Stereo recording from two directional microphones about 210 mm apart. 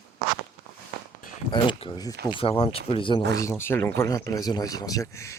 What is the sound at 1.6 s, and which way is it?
Speech, 20° left (ahead or behind).